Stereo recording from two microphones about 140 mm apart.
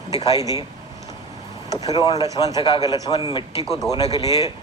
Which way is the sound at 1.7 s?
25° left (ahead or behind).